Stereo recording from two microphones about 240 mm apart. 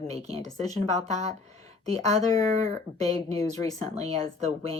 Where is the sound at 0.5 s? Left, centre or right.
Right.